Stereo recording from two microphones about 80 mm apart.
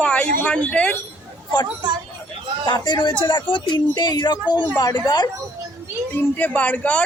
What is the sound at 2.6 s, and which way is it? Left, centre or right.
Speech, left.